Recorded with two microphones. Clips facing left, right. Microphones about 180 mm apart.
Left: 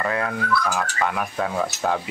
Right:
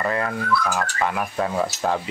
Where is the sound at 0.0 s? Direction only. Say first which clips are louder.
Even; centre (ahead or behind).